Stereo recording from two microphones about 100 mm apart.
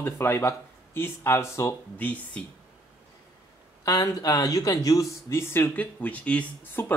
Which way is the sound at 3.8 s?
35° left (ahead or behind).